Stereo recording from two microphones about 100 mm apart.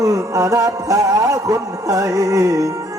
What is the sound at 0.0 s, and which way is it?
Music, 35° right (ahead or behind).